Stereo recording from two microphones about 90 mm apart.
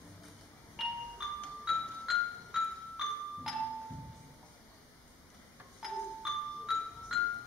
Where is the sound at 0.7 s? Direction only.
5° right (ahead or behind).